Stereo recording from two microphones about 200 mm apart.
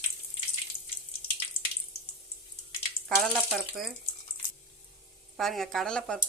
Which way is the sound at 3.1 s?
Centre (ahead or behind).